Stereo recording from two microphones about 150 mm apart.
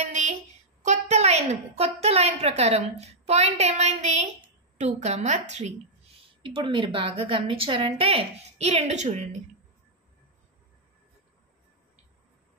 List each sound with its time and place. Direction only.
0.0 s a sound: 50° right (ahead or behind)
0.8 s a woman's voice: 50° right (ahead or behind)
6.4 s a woman's voice: 35° right (ahead or behind); by 9.3 s 50° right (ahead or behind)